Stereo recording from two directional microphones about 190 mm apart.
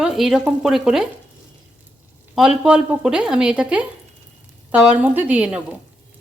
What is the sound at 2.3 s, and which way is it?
A woman's voice, 5° right (ahead or behind).